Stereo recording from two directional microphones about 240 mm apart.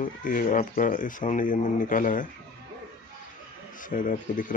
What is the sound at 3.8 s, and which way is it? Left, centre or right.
Speech, left.